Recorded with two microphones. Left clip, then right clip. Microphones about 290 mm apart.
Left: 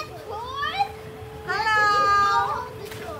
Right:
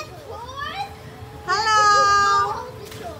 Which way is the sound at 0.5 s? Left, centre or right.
Centre.